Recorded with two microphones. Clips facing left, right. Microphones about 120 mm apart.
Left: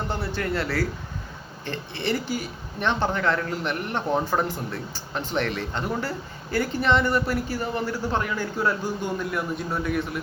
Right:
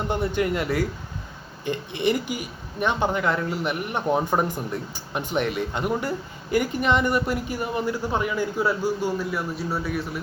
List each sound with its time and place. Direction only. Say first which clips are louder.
0.1 s speech: right 7 dB; 15° right (ahead or behind); by 10.2 s centre (ahead or behind)